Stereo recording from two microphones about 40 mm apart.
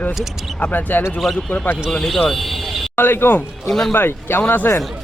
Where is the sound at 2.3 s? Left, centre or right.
Centre.